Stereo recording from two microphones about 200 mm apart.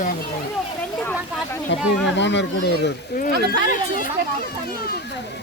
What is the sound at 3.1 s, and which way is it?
Speech, 45° left (ahead or behind).